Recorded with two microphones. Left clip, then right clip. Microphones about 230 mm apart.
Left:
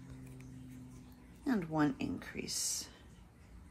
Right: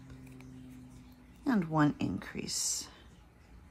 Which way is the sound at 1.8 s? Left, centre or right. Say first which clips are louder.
Right 5 dB; right.